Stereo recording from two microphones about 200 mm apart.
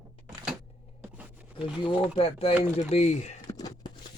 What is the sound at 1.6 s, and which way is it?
Speech, 25° left (ahead or behind).